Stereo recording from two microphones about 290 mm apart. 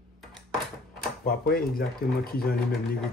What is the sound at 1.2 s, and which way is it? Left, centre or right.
Speech, left.